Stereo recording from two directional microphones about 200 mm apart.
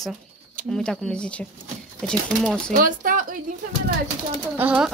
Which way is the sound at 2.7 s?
45° right (ahead or behind).